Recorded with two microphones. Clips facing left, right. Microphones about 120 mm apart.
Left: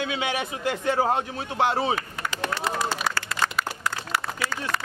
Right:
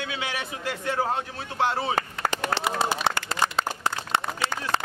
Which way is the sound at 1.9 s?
40° right (ahead or behind).